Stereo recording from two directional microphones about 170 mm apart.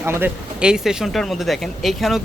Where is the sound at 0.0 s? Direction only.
15° right (ahead or behind).